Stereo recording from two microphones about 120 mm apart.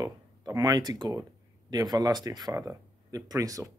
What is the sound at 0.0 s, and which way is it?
Speech, 35° right (ahead or behind).